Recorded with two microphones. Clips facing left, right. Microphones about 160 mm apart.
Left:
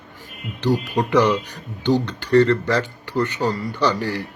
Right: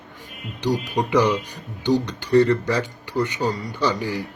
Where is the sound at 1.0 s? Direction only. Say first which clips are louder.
Left 1 dB; 10° right (ahead or behind).